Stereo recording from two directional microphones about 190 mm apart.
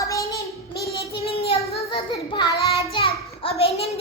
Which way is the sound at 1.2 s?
30° left (ahead or behind).